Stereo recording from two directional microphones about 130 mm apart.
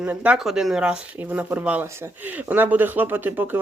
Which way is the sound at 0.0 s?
10° right (ahead or behind).